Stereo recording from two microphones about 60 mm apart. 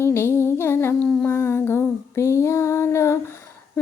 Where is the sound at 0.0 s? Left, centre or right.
Left.